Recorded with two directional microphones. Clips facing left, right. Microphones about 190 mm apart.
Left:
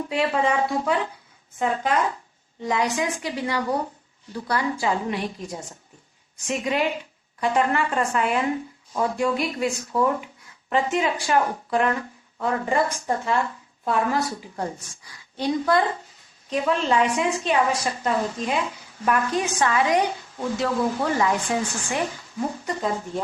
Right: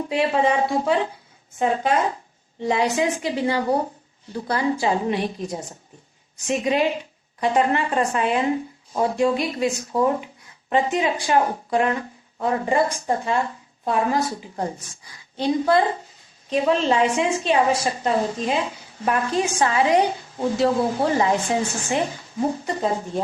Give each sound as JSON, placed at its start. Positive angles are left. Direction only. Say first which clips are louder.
{"t": 0.0, "sound": "a woman's voice", "louder": "right 3 dB", "side_deg": -25}